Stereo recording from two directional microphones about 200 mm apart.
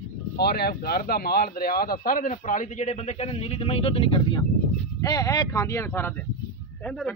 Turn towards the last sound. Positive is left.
turn(degrees=5)  # may be behind; listen again after turning